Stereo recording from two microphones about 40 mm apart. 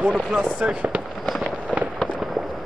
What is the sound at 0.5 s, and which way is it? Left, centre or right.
Speech, right.